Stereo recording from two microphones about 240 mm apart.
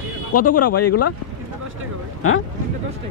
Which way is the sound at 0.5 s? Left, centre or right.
Left.